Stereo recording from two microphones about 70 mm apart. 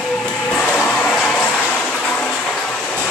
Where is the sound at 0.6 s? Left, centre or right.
Centre.